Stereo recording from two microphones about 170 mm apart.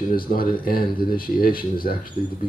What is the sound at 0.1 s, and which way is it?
Speech, 60° left (ahead or behind).